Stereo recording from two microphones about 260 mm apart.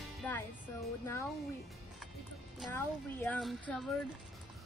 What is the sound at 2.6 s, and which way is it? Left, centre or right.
Speech, centre.